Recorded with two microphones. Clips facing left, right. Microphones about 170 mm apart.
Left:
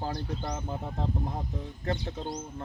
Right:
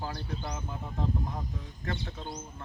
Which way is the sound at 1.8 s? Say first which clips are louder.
Left 5 dB; 35° left (ahead or behind).